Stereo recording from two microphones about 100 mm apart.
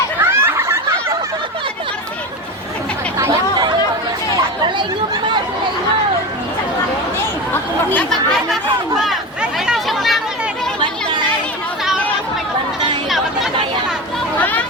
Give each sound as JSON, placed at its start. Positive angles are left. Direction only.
{"t": 0.2, "sound": "a sound", "side_deg": -25}
{"t": 3.2, "sound": "chatter", "side_deg": -30}
{"t": 7.5, "sound": "chatter", "side_deg": 20}
{"t": 9.0, "sound": "chatter", "side_deg": -5}
{"t": 13.1, "sound": "chatter", "side_deg": 0}
{"t": 14.3, "sound": "a sound", "side_deg": 15}